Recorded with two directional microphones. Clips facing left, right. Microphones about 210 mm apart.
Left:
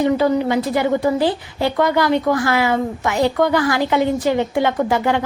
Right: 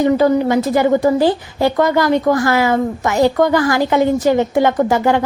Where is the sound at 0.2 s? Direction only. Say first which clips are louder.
Right 3 dB; 45° right (ahead or behind).